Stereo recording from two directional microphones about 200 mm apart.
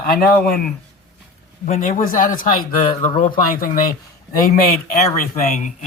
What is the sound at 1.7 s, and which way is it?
A man's voice, 40° left (ahead or behind).